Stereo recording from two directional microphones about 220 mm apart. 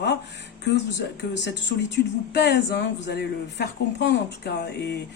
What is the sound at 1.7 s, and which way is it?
Speech, 45° left (ahead or behind).